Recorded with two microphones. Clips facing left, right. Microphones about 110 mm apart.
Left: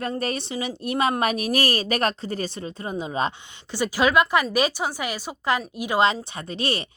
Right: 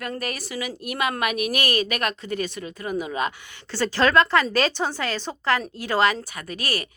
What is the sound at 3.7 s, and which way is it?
A woman's voice, 10° left (ahead or behind).